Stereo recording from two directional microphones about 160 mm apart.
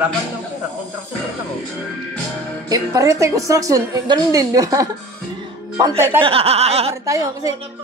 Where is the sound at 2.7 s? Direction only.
20° right (ahead or behind).